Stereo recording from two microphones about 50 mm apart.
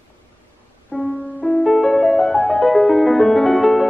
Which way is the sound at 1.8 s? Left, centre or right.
Centre.